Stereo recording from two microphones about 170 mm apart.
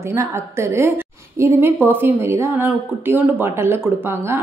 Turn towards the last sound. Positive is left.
turn(degrees=-15)  # may be behind; listen again after turning